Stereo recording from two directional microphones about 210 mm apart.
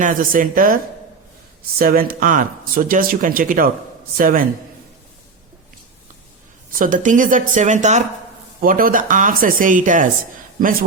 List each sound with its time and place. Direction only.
0.0 s speech: 40° right (ahead or behind)
1.8 s speech: 45° right (ahead or behind)
6.7 s speech: 40° right (ahead or behind)